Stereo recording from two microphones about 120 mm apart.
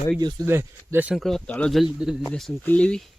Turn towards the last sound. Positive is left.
turn(degrees=10)  # may be behind; listen again after turning